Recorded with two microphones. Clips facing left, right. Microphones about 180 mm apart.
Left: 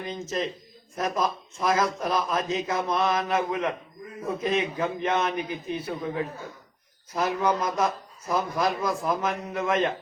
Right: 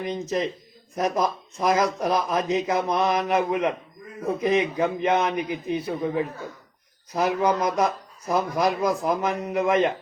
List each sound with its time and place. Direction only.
0.1 s speech: 15° right (ahead or behind)
7.1 s speech: 20° right (ahead or behind)